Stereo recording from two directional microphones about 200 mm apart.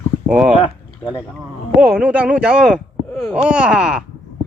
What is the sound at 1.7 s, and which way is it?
Speech, 5° right (ahead or behind).